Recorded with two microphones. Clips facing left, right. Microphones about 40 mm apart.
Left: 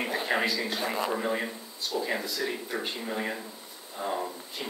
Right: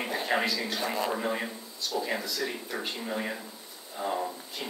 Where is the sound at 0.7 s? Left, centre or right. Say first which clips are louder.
Even; centre.